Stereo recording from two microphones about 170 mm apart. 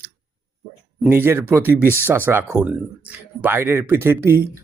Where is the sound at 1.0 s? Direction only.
10° right (ahead or behind).